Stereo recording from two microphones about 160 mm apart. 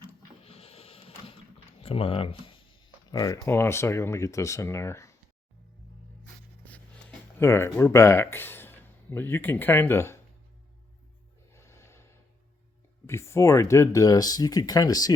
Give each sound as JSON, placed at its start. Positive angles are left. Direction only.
{"t": 0.4, "sound": "printer", "side_deg": 35}
{"t": 1.8, "sound": "speech", "side_deg": 35}
{"t": 3.1, "sound": "speech", "side_deg": 25}
{"t": 7.3, "sound": "speech", "side_deg": 15}
{"t": 11.5, "sound": "snort", "side_deg": 15}
{"t": 13.1, "sound": "speech", "side_deg": 15}